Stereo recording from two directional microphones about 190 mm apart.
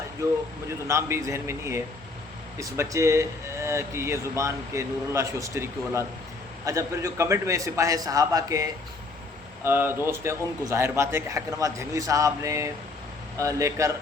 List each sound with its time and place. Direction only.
0.9 s speech: 15° right (ahead or behind)